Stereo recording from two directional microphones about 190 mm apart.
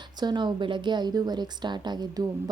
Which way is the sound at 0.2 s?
25° right (ahead or behind).